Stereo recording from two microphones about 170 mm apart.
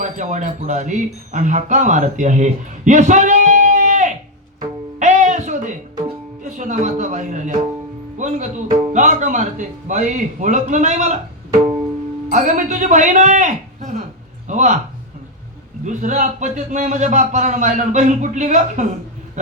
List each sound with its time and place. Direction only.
0.0 s speech: 45° right (ahead or behind)
4.9 s music: 45° right (ahead or behind)
8.2 s a man's voice: 45° right (ahead or behind)
12.3 s a man's voice: 45° right (ahead or behind)
15.8 s a man's voice: 45° right (ahead or behind)